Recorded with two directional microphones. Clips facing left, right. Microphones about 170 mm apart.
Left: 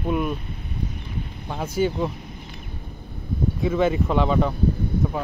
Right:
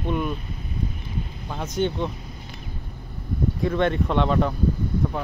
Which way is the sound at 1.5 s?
5° left (ahead or behind).